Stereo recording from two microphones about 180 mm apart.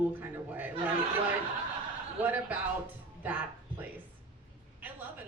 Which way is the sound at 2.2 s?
10° right (ahead or behind).